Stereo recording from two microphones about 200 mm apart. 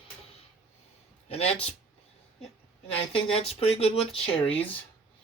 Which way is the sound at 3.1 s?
30° left (ahead or behind).